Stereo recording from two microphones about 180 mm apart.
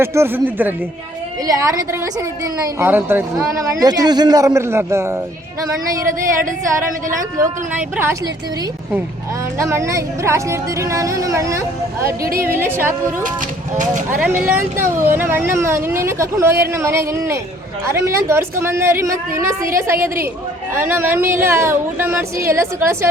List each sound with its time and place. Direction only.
0.0 s a woman's voice: 15° right (ahead or behind)
7.2 s a woman's voice: 10° right (ahead or behind)
9.6 s a woman's voice: 15° right (ahead or behind)
12.0 s speech: 55° right (ahead or behind)
12.5 s a woman's voice: 15° right (ahead or behind)
14.1 s a woman's voice: 10° right (ahead or behind)